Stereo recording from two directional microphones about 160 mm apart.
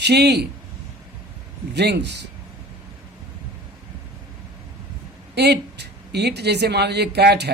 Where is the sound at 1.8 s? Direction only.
90° right.